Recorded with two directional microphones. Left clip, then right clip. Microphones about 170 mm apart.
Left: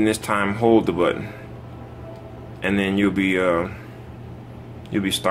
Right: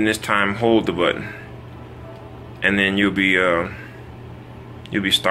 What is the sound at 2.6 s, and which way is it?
Speech, 20° left (ahead or behind).